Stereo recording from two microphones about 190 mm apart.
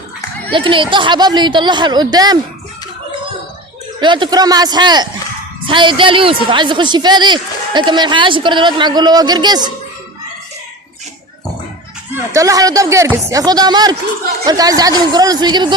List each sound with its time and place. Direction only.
0.5 s a woman's voice: 25° right (ahead or behind)
4.0 s a woman's voice: 25° right (ahead or behind)
12.1 s a woman's voice: 15° right (ahead or behind)